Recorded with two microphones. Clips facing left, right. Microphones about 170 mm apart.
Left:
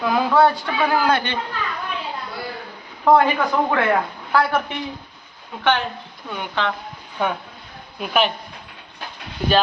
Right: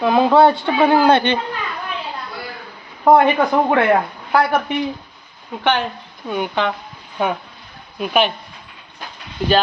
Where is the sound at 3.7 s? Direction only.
20° right (ahead or behind).